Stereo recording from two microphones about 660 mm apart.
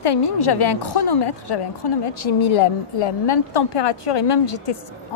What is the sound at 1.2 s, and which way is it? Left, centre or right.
A woman's voice, left.